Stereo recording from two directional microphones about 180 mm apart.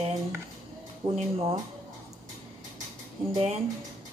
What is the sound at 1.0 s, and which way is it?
Speech, 25° right (ahead or behind).